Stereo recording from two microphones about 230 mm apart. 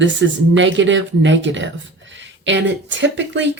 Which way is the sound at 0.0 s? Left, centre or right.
Right.